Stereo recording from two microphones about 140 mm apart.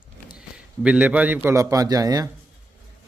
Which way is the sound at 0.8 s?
10° right (ahead or behind).